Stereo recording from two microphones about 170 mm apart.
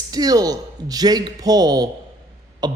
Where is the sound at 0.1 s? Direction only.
20° right (ahead or behind).